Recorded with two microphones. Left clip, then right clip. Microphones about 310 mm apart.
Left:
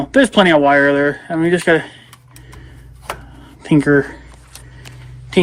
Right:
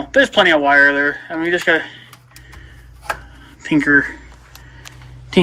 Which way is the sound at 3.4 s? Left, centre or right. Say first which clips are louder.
Left 3 dB; centre.